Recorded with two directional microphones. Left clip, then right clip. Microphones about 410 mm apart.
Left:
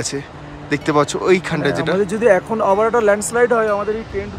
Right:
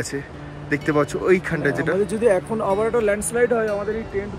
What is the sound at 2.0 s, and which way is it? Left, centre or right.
Speech, left.